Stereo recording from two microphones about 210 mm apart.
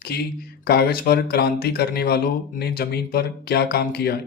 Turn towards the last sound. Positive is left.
turn(degrees=50)  # may be behind; listen again after turning